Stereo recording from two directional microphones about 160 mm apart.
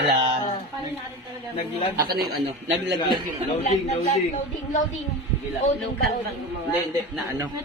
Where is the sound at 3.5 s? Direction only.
40° left (ahead or behind).